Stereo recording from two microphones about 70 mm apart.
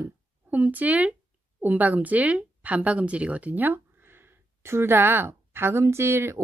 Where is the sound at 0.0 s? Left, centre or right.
Right.